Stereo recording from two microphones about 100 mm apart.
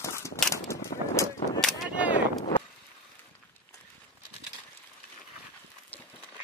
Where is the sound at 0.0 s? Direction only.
30° left (ahead or behind).